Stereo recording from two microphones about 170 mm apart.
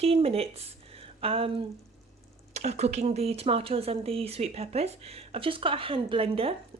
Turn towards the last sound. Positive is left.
turn(degrees=-35)  # may be behind; listen again after turning